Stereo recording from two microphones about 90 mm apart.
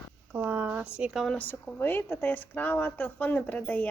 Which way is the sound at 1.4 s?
20° left (ahead or behind).